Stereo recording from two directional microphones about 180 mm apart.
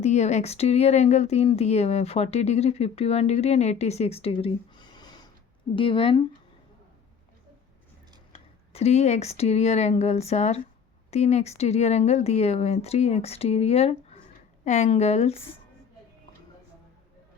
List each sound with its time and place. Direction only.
0.0 s speech: 40° left (ahead or behind)
8.3 s speech: 35° left (ahead or behind)